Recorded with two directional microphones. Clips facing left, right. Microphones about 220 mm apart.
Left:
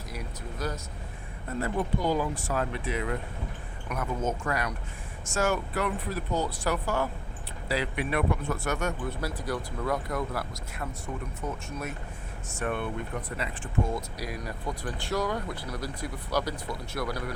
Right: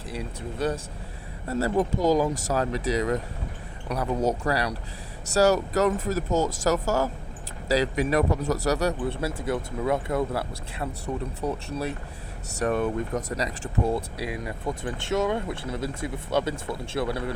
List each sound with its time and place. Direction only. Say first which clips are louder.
0.1 s speech: right 6 dB; 30° right (ahead or behind)